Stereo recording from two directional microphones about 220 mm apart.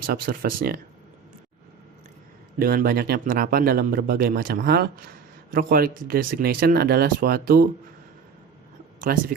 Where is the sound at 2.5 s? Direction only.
40° right (ahead or behind).